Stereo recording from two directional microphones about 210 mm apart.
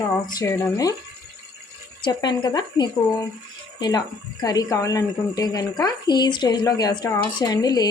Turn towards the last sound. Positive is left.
turn(degrees=20)  # may be behind; listen again after turning